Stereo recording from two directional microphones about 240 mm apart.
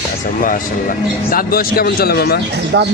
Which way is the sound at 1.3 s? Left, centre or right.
Left.